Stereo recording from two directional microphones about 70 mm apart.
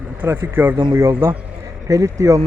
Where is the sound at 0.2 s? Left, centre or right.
Right.